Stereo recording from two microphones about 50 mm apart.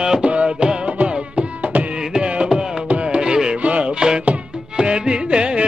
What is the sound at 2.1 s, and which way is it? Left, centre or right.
Carnatic music, right.